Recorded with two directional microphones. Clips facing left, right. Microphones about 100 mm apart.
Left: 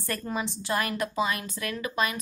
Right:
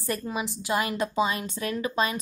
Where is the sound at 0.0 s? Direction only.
15° right (ahead or behind).